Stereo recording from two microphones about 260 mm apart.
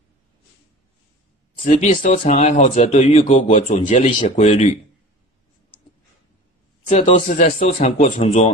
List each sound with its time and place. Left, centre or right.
1.6 s speech: left
6.9 s speech: left